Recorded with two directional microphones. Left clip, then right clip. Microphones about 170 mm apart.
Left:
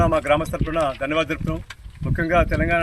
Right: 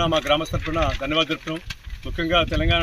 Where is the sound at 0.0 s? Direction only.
20° left (ahead or behind).